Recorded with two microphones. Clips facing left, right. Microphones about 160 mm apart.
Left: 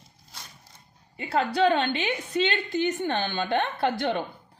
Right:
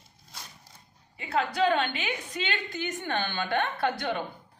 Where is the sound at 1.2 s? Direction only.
30° left (ahead or behind).